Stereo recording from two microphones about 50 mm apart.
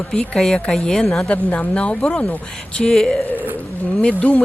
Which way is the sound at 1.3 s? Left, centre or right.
Left.